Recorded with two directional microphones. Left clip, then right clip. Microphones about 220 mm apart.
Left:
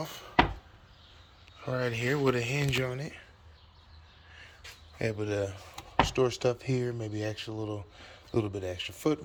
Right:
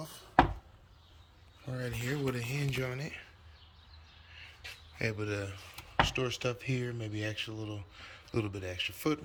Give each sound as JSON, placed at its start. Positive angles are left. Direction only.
{"t": 1.6, "sound": "speech", "side_deg": -5}
{"t": 4.9, "sound": "speech", "side_deg": 10}